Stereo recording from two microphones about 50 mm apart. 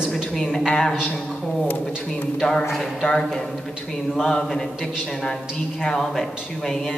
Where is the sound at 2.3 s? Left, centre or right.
Centre.